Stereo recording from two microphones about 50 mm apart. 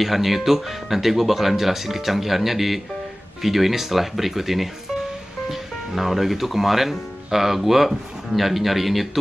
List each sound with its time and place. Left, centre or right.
0.0 s speech: centre